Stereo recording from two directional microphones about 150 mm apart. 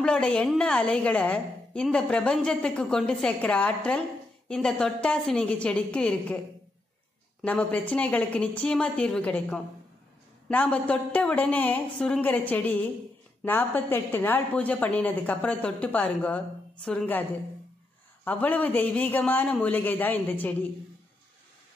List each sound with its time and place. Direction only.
0.0 s a woman's voice: 5° left (ahead or behind)
7.4 s a woman's voice: 10° left (ahead or behind)
18.2 s a woman's voice: 10° left (ahead or behind)